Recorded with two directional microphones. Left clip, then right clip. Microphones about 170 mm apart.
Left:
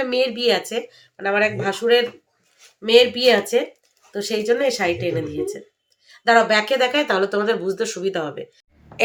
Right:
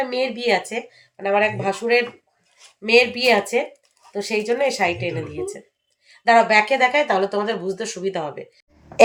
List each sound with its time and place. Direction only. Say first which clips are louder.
0.1 s speech: left 2 dB; 20° left (ahead or behind)